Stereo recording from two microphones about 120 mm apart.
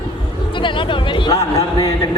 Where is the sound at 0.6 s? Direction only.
45° left (ahead or behind).